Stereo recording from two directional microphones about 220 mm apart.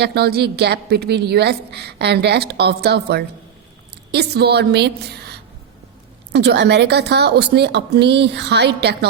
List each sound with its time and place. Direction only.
0.0 s a woman's voice: 45° right (ahead or behind)